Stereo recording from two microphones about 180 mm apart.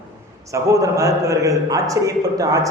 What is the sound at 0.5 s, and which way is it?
A man's voice, 20° right (ahead or behind).